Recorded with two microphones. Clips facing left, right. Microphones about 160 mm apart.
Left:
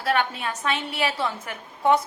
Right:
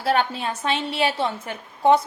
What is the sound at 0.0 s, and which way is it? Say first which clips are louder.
A woman's voice: right 2 dB; 30° right (ahead or behind).